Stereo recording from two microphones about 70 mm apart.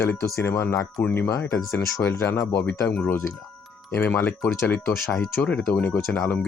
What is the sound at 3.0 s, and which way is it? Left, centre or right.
Speech, left.